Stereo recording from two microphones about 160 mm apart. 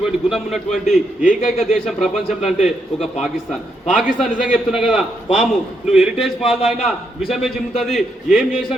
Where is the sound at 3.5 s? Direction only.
Centre (ahead or behind).